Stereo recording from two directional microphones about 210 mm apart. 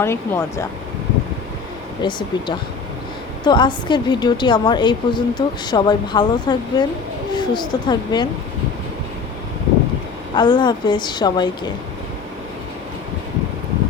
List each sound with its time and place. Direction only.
0.0 s speech: 10° left (ahead or behind)
2.0 s a woman's voice: 20° left (ahead or behind)
10.3 s a woman's voice: 20° left (ahead or behind)